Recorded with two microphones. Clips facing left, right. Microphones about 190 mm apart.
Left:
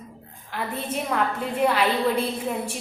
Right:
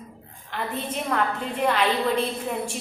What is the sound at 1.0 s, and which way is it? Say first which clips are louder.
Speech: even; 5° left (ahead or behind).